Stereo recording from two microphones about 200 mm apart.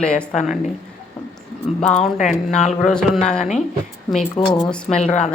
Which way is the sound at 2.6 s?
35° left (ahead or behind).